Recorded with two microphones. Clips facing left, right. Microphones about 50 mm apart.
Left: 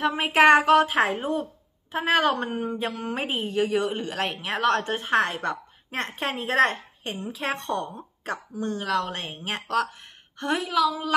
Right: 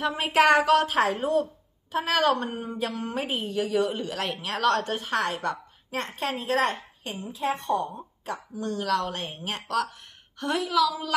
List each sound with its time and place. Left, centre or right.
0.0 s a woman's voice: left
4.7 s a woman's voice: left
7.3 s a woman's voice: left
8.5 s a woman's voice: left